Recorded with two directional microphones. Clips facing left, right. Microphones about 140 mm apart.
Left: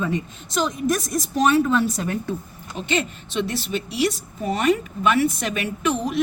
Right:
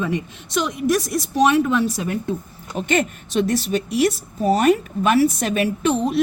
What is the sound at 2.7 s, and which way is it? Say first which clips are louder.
Speech: right 4 dB; 50° right (ahead or behind).